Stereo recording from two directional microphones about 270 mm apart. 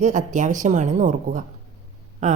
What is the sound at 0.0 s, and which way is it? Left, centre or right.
A woman's voice, right.